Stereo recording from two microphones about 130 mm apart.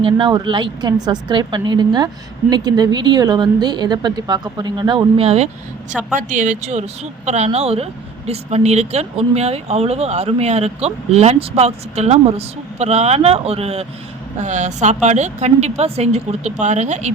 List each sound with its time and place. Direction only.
0.0 s a woman's voice: 35° right (ahead or behind)
6.1 s speech: 70° right (ahead or behind); by 13.8 s 50° right (ahead or behind)
14.3 s speech: 65° right (ahead or behind)